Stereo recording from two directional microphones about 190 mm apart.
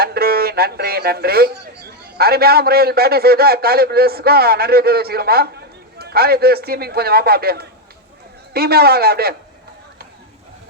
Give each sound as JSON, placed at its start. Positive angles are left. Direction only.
{"t": 0.0, "sound": "speech", "side_deg": -55}